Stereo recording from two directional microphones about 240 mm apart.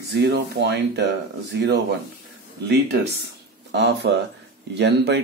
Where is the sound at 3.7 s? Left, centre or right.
Right.